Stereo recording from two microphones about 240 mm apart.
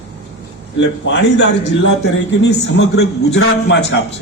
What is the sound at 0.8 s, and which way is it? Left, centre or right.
A man's voice, left.